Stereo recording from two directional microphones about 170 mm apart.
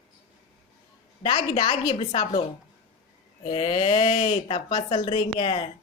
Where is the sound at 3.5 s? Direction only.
35° left (ahead or behind).